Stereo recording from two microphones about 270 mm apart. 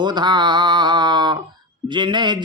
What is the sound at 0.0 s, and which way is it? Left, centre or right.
Mantra, centre.